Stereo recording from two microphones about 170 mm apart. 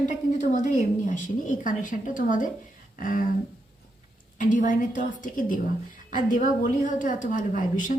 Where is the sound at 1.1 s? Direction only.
50° left (ahead or behind).